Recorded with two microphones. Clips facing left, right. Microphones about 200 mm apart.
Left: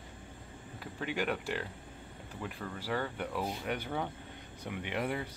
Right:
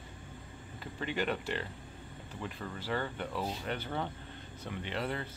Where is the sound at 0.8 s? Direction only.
5° left (ahead or behind).